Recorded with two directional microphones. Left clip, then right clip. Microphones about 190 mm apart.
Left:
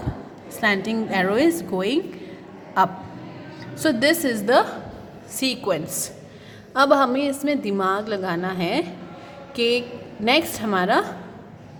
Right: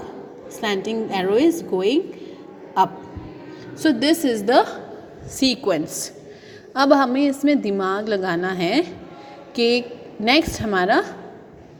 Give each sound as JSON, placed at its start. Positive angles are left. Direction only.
{"t": 0.6, "sound": "a woman's voice", "side_deg": 0}